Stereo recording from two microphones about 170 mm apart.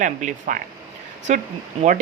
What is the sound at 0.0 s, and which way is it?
Speech, 45° right (ahead or behind).